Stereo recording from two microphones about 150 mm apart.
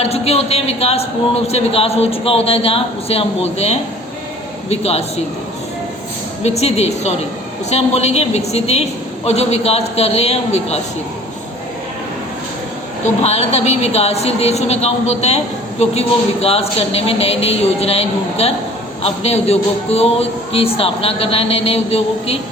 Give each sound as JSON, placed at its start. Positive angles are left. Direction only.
{"t": 0.0, "sound": "speech", "side_deg": 45}
{"t": 6.4, "sound": "speech", "side_deg": 45}
{"t": 13.2, "sound": "speech", "side_deg": 45}